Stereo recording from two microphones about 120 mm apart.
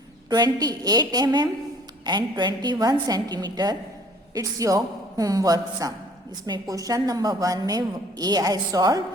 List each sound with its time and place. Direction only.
0.3 s a woman's voice: 35° right (ahead or behind)